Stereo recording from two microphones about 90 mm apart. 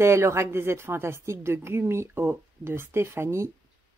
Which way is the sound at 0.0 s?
30° right (ahead or behind).